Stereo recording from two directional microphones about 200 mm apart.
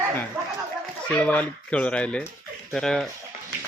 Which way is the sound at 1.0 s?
10° left (ahead or behind).